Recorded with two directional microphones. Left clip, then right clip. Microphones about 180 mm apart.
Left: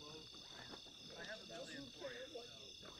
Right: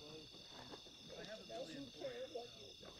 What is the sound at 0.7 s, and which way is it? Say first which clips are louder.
Cricket: even; 35° right (ahead or behind).